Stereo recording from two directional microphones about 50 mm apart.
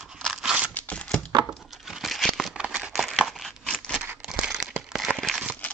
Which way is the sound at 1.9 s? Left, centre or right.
Centre.